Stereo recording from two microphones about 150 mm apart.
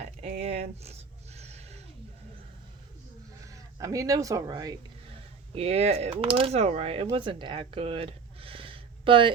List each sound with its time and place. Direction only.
0.2 s a sound: 45° right (ahead or behind)
3.4 s speech: 20° right (ahead or behind)
5.5 s speech: 40° right (ahead or behind)